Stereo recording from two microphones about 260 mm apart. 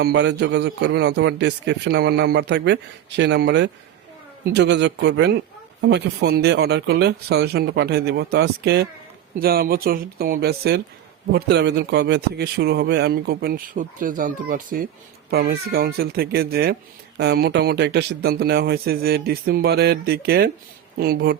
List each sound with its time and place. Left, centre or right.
0.0 s a man's voice: right